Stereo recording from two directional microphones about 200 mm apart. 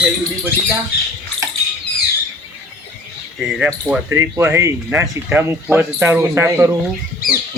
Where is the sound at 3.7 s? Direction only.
10° right (ahead or behind).